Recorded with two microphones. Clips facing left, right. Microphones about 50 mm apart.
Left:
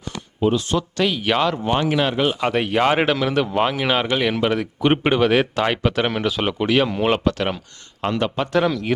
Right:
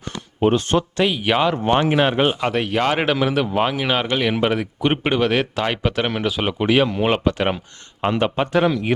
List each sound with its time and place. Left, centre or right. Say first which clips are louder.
0.0 s a sound: right 2 dB; right
0.9 s a man's voice: left 1 dB; centre
1.6 s speech: right 3 dB; right
2.4 s a man's voice: left 1 dB; centre